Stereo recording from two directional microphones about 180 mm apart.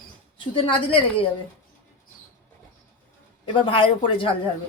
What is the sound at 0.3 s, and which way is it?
Speech, 30° left (ahead or behind).